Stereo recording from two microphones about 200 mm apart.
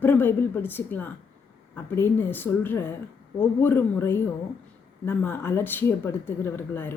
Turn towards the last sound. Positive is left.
turn(degrees=10)  # may be behind; listen again after turning